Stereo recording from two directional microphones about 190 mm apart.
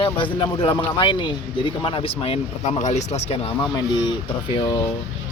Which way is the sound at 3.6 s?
25° left (ahead or behind).